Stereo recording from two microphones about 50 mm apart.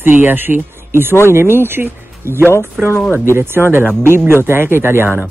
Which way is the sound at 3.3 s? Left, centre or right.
Right.